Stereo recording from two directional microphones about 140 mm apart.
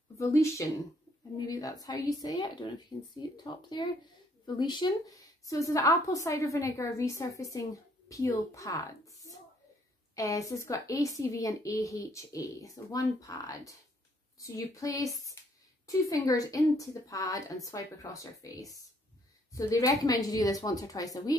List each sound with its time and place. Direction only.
0.2 s a woman's voice: 20° left (ahead or behind)